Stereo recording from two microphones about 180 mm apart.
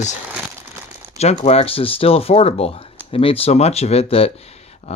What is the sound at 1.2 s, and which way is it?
Speech, 35° left (ahead or behind).